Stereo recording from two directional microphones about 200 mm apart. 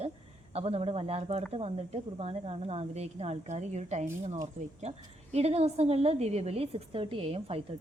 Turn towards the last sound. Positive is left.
turn(degrees=-30)  # may be behind; listen again after turning